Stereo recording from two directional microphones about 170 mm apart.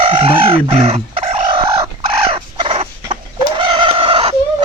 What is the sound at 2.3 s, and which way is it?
Fowl, 30° right (ahead or behind).